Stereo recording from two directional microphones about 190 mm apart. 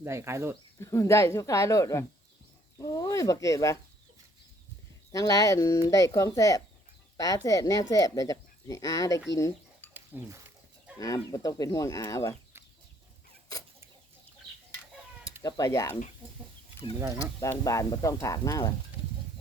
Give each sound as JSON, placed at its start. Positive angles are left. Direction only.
{"t": 0.0, "sound": "speech", "side_deg": -15}
{"t": 0.8, "sound": "speech", "side_deg": 15}
{"t": 5.1, "sound": "speech", "side_deg": 20}
{"t": 9.3, "sound": "dishes", "side_deg": 15}
{"t": 9.9, "sound": "a sound", "side_deg": -10}
{"t": 11.0, "sound": "speech", "side_deg": 15}
{"t": 15.4, "sound": "speech", "side_deg": 20}
{"t": 17.4, "sound": "speech", "side_deg": 15}